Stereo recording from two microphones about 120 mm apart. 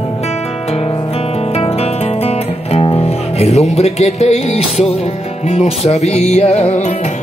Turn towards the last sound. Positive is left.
turn(degrees=70)  # may be behind; listen again after turning